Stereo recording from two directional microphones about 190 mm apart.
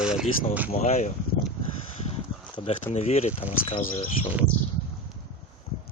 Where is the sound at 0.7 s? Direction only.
35° left (ahead or behind).